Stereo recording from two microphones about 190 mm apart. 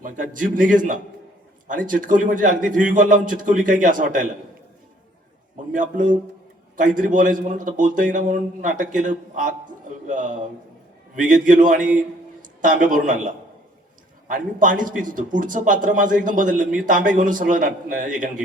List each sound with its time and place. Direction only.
0.0 s a man's voice: 45° right (ahead or behind)
5.7 s a man's voice: 45° right (ahead or behind)